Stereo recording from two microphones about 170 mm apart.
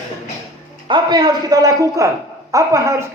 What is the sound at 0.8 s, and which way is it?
Speech, 25° right (ahead or behind).